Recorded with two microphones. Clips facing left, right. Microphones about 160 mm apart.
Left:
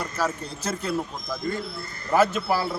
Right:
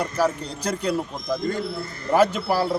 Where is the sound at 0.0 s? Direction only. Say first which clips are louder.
Right 5 dB; 15° right (ahead or behind).